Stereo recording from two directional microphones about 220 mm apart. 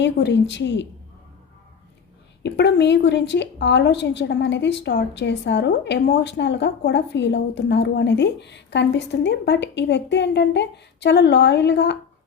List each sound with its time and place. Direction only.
0.0 s a woman's voice: 50° left (ahead or behind)
2.4 s a woman's voice: 50° left (ahead or behind)